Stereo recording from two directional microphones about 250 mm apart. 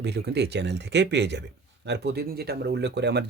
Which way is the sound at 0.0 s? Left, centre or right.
Right.